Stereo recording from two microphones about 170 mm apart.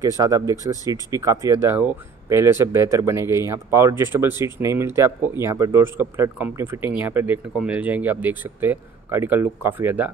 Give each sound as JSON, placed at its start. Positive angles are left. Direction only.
{"t": 0.2, "sound": "speech", "side_deg": -20}